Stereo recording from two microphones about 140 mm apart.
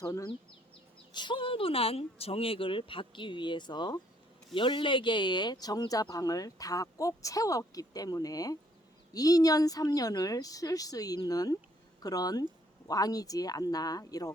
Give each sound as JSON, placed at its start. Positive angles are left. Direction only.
{"t": 0.0, "sound": "speech", "side_deg": 25}
{"t": 1.1, "sound": "speech", "side_deg": 35}